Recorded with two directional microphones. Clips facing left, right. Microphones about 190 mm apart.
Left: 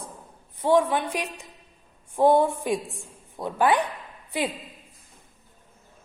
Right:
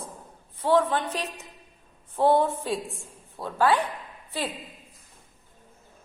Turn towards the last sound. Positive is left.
turn(degrees=15)  # may be behind; listen again after turning